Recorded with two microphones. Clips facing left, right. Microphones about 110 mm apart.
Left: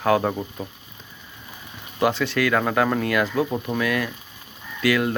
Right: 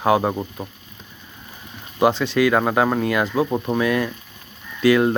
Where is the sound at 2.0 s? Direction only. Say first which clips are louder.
Right 4 dB; 20° right (ahead or behind).